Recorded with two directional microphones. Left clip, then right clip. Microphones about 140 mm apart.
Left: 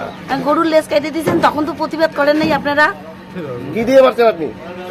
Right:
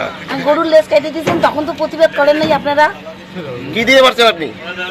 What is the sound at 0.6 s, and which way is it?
Speech, 15° left (ahead or behind).